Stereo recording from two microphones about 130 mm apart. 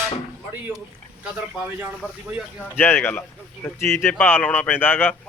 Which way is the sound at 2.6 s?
15° left (ahead or behind).